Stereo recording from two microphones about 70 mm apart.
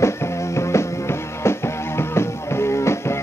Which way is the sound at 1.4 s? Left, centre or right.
Left.